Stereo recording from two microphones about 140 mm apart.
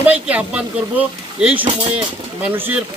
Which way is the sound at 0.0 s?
10° right (ahead or behind).